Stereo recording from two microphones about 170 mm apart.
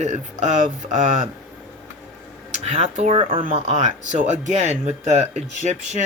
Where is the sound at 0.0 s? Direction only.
40° right (ahead or behind).